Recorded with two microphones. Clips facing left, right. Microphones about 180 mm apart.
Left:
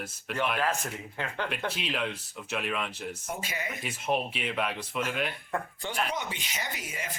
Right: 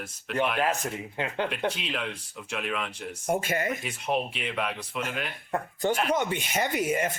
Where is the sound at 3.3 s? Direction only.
50° right (ahead or behind).